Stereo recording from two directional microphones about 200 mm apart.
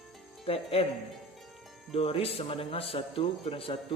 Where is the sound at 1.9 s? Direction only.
30° left (ahead or behind).